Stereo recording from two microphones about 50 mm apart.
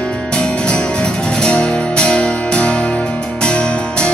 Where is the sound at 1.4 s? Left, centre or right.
Centre.